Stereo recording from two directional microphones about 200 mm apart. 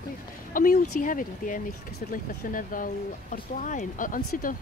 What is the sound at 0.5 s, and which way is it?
Speech, 45° left (ahead or behind).